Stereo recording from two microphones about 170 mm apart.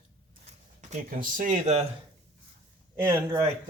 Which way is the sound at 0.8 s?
45° right (ahead or behind).